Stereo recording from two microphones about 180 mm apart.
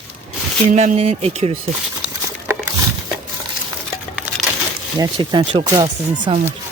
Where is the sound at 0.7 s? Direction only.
45° right (ahead or behind).